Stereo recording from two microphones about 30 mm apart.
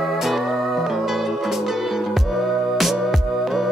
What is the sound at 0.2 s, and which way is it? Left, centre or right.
Music, centre.